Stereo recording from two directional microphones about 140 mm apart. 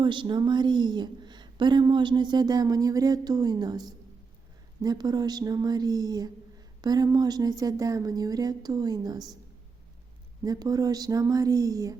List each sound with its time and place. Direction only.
0.0 s a woman's voice: 35° right (ahead or behind)
10.4 s speech: 25° right (ahead or behind)